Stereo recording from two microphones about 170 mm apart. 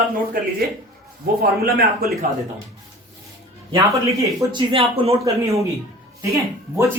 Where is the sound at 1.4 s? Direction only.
65° right (ahead or behind).